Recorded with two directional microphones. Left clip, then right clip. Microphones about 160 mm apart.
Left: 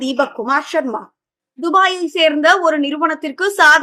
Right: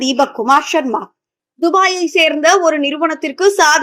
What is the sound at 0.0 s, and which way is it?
Speech, 15° right (ahead or behind).